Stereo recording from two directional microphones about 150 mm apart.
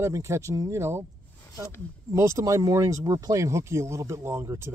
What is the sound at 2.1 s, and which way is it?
Speech, 20° right (ahead or behind).